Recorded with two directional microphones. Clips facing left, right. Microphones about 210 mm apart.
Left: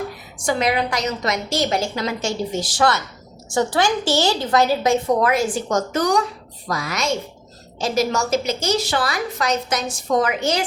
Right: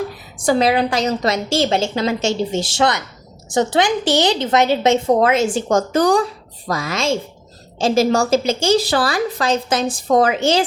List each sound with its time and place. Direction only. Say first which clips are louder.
0.4 s a woman's voice: right 5 dB; 35° right (ahead or behind)